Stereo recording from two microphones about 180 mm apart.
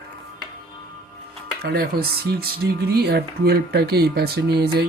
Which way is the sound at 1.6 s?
60° right (ahead or behind).